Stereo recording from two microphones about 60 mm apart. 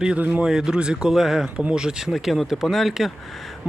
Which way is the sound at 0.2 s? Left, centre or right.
Right.